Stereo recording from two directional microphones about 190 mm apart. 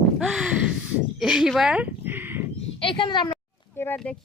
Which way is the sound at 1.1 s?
5° right (ahead or behind).